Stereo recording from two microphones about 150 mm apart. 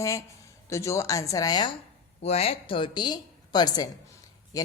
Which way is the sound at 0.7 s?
20° left (ahead or behind).